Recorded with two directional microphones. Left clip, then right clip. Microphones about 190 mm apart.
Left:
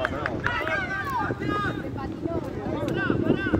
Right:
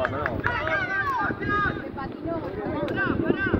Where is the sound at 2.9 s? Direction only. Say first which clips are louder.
Left 1 dB; 15° right (ahead or behind).